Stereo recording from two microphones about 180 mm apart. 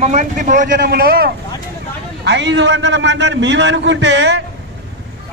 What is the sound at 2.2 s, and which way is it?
A man's voice, 75° right (ahead or behind).